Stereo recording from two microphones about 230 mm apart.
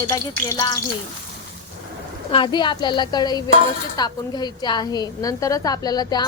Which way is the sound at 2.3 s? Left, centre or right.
Left.